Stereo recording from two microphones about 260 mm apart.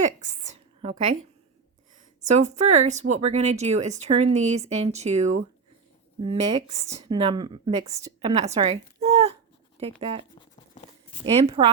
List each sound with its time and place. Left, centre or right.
0.0 s a sound: right
2.2 s a woman's voice: right
11.3 s a woman's voice: right